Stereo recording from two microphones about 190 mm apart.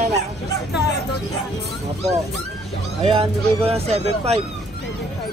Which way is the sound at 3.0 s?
30° right (ahead or behind).